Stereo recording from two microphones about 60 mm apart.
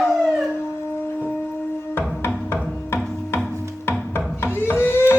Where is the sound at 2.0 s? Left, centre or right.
Left.